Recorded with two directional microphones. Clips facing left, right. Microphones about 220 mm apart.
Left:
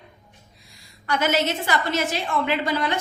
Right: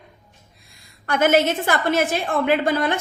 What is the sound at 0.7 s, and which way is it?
A woman's voice, 50° right (ahead or behind).